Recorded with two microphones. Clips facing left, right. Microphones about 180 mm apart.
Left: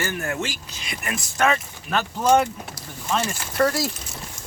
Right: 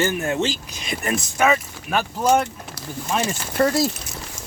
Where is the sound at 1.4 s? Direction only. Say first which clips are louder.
Right 1 dB; 5° right (ahead or behind).